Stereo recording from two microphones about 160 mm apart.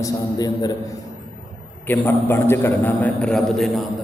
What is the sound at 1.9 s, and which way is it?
A man's voice, 15° left (ahead or behind).